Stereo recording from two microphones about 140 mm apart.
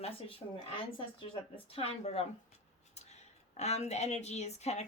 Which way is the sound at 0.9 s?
40° left (ahead or behind).